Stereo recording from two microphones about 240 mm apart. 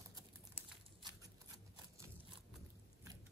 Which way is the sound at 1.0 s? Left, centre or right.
Centre.